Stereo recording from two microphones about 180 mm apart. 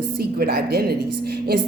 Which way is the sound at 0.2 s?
60° right (ahead or behind).